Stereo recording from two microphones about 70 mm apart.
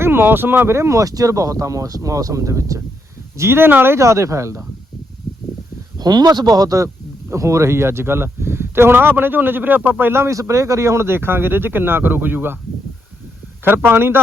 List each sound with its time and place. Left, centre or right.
0.0 s speech: right
6.0 s speech: right
10.4 s speech: right
13.8 s speech: right